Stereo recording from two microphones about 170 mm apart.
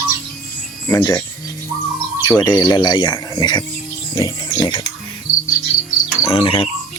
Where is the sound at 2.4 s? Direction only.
25° left (ahead or behind).